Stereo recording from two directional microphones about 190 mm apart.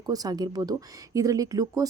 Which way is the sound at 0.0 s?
20° right (ahead or behind).